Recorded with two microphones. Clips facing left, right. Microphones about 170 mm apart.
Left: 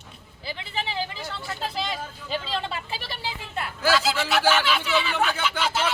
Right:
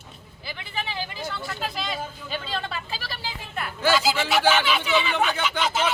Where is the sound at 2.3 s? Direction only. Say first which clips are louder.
Left 3 dB; 25° left (ahead or behind).